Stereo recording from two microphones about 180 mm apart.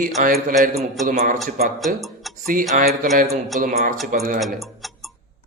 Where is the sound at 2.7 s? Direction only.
50° right (ahead or behind).